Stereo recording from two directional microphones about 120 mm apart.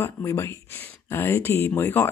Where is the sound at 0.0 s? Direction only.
25° left (ahead or behind).